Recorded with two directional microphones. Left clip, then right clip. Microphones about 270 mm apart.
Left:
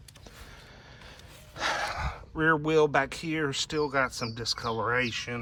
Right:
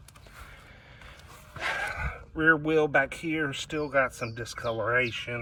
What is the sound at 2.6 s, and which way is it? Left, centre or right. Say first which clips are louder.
Speech: even; centre.